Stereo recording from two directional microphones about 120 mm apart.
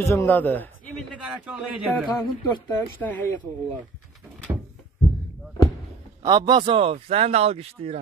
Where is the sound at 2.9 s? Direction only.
15° left (ahead or behind).